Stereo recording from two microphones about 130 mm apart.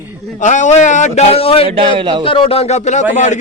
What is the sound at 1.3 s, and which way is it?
Speech, 50° left (ahead or behind).